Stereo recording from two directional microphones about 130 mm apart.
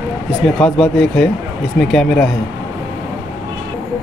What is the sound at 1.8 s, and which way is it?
Speech, centre (ahead or behind).